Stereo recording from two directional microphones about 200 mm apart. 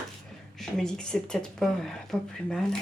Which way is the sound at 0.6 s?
Centre (ahead or behind).